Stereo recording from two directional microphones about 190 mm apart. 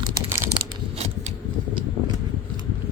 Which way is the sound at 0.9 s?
35° right (ahead or behind).